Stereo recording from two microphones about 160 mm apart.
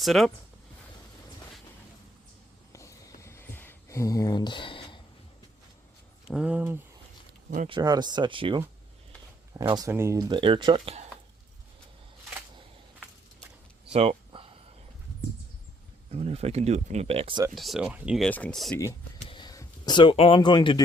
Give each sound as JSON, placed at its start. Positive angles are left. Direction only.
{"t": 0.0, "sound": "speech", "side_deg": 0}
{"t": 3.2, "sound": "a sound", "side_deg": 15}
{"t": 6.3, "sound": "speech", "side_deg": -5}
{"t": 7.7, "sound": "speech", "side_deg": -25}
{"t": 13.9, "sound": "a sound", "side_deg": -40}
{"t": 16.1, "sound": "speech", "side_deg": -40}
{"t": 17.5, "sound": "speech", "side_deg": 0}
{"t": 18.3, "sound": "speech", "side_deg": 10}
{"t": 19.3, "sound": "a sound", "side_deg": 25}
{"t": 20.1, "sound": "speech", "side_deg": 35}